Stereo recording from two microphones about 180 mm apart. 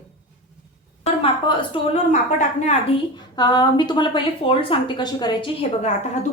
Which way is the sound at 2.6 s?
40° left (ahead or behind).